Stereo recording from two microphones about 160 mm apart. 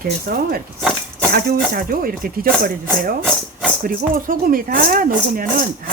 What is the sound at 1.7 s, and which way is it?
Speech, 65° right (ahead or behind).